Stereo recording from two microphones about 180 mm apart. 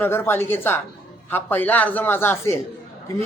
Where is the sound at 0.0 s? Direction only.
10° left (ahead or behind).